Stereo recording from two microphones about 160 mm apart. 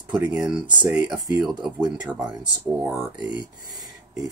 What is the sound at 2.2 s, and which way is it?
Speech, 25° right (ahead or behind).